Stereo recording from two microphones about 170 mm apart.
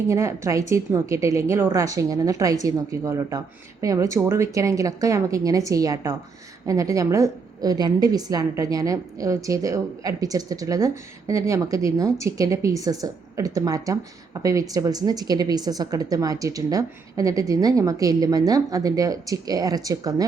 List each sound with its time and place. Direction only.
0.1 s a woman's voice: 15° right (ahead or behind)